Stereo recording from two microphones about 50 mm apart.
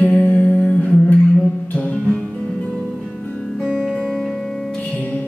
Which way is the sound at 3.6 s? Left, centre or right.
Centre.